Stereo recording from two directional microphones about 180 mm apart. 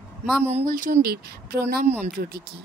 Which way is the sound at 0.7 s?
50° right (ahead or behind).